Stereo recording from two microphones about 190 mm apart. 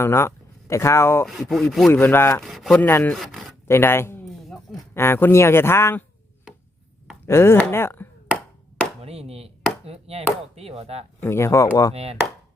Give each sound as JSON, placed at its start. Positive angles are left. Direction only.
{"t": 0.0, "sound": "speech", "side_deg": 15}
{"t": 1.3, "sound": "speech", "side_deg": 0}
{"t": 1.9, "sound": "speech", "side_deg": 10}
{"t": 2.4, "sound": "speech", "side_deg": 0}
{"t": 3.7, "sound": "speech", "side_deg": 10}
{"t": 4.3, "sound": "a sound", "side_deg": 0}
{"t": 4.7, "sound": "speech", "side_deg": 10}
{"t": 7.3, "sound": "speech", "side_deg": 15}
{"t": 9.0, "sound": "chop", "side_deg": -30}
{"t": 9.8, "sound": "chopping", "side_deg": -30}
{"t": 10.5, "sound": "speech", "side_deg": -30}
{"t": 11.2, "sound": "speech", "side_deg": 15}